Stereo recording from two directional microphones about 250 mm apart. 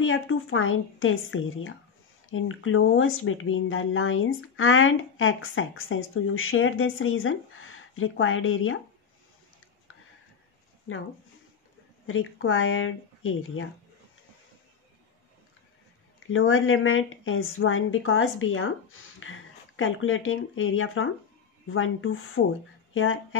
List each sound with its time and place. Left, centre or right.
0.0 s speech: left
10.9 s speech: left
12.1 s speech: left
16.3 s speech: left